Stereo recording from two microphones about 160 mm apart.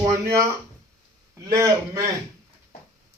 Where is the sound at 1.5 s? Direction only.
20° right (ahead or behind).